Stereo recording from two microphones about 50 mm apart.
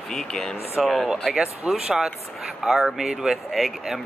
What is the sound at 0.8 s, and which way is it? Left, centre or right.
Speech, centre.